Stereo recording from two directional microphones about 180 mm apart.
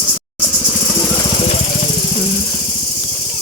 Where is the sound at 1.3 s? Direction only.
35° left (ahead or behind).